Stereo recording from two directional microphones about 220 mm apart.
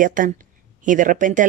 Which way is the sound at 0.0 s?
35° right (ahead or behind).